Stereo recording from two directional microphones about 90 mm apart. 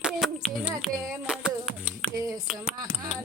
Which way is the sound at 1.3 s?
5° right (ahead or behind).